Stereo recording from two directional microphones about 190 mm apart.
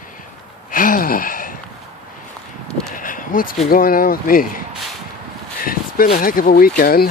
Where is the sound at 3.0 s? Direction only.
45° left (ahead or behind).